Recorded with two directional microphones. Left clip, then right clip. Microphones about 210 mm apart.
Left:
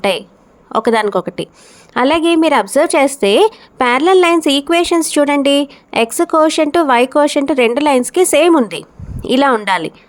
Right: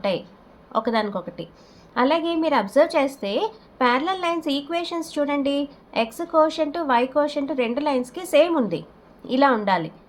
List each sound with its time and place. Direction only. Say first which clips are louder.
0.7 s a woman's voice: left 10 dB; 50° left (ahead or behind)